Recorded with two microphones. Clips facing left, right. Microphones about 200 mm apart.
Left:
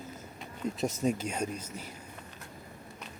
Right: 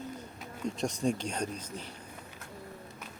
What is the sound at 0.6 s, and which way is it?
Speech, 5° left (ahead or behind).